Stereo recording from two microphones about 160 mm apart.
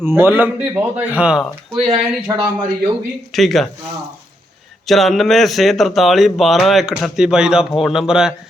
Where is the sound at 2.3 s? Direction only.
20° right (ahead or behind).